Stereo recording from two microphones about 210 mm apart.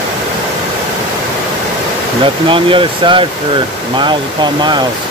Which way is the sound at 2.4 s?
25° right (ahead or behind).